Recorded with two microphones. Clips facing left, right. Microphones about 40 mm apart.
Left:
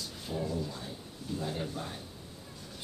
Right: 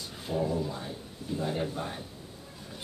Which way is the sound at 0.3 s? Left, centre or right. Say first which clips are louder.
Right 5 dB; centre.